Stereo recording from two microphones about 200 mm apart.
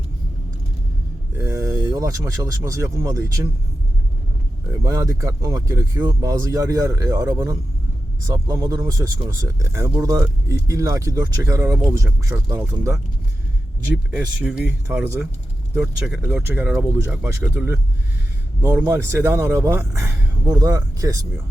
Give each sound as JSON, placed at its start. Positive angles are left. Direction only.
{"t": 1.4, "sound": "speech", "side_deg": -15}
{"t": 4.7, "sound": "speech", "side_deg": -15}
{"t": 14.9, "sound": "speech", "side_deg": -10}